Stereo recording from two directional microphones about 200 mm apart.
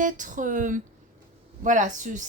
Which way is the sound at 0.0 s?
40° right (ahead or behind).